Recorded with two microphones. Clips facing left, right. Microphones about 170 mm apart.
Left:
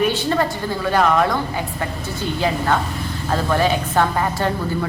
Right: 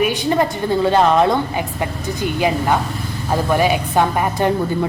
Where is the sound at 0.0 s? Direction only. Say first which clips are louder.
Right 2 dB; 15° right (ahead or behind).